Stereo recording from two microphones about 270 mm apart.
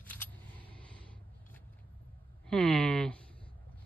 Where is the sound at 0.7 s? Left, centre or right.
Centre.